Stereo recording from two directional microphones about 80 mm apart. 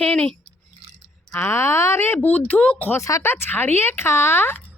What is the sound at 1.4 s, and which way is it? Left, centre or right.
Speech, left.